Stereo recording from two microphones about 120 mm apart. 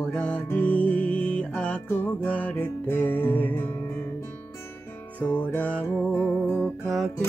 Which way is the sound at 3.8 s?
30° left (ahead or behind).